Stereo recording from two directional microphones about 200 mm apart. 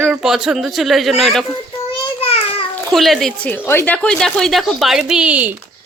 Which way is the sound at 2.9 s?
Centre (ahead or behind).